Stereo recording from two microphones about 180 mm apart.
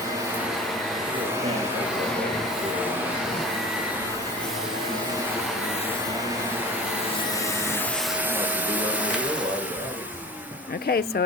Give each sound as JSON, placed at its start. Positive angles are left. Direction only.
{"t": 8.4, "sound": "spray", "side_deg": -10}
{"t": 10.8, "sound": "speech", "side_deg": 65}